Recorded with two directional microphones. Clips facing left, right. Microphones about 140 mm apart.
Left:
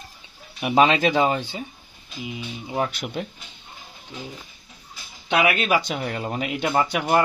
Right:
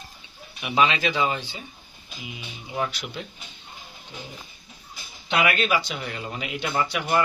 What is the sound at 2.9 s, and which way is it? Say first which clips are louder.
Speech: left 6 dB; 50° left (ahead or behind).